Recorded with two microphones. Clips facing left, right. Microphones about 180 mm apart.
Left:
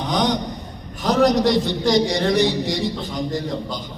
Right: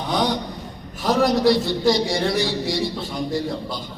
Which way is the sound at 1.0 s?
20° left (ahead or behind).